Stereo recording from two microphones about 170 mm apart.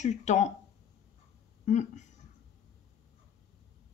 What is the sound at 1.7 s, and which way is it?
Speech, 45° left (ahead or behind).